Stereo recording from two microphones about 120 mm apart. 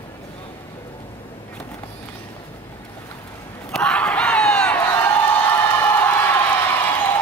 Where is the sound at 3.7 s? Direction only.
5° left (ahead or behind).